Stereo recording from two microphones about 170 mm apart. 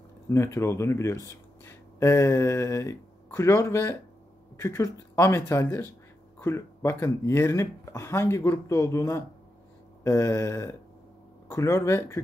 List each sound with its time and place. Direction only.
0.3 s speech: 15° left (ahead or behind)